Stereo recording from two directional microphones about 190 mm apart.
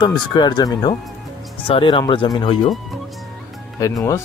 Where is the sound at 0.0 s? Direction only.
25° left (ahead or behind).